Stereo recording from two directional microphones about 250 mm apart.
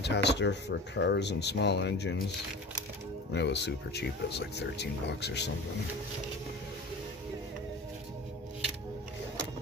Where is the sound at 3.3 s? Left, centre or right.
Left.